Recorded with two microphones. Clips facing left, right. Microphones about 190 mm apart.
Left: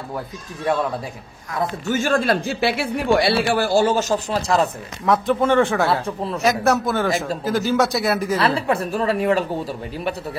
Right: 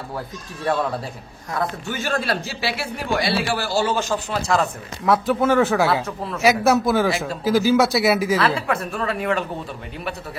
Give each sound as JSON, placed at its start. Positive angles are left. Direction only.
{"t": 1.9, "sound": "speech", "side_deg": 45}
{"t": 5.0, "sound": "speech", "side_deg": -5}
{"t": 6.0, "sound": "a woman's voice", "side_deg": 30}
{"t": 6.4, "sound": "speech", "side_deg": 0}
{"t": 8.5, "sound": "a woman's voice", "side_deg": 35}